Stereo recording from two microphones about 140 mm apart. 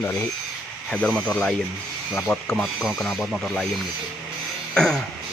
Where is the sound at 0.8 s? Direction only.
10° left (ahead or behind).